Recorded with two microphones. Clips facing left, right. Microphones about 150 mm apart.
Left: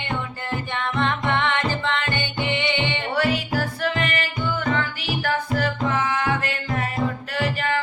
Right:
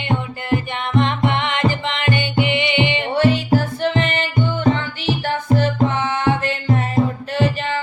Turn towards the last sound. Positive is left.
turn(degrees=-20)  # may be behind; listen again after turning